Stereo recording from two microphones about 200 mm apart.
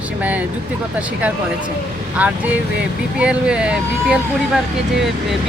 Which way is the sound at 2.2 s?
5° right (ahead or behind).